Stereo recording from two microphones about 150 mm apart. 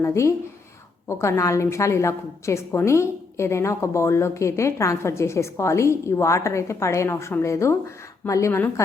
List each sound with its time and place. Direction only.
0.0 s a woman's voice: 20° left (ahead or behind)